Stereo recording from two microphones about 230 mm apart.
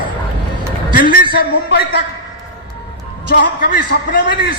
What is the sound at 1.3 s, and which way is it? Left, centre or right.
Speech, left.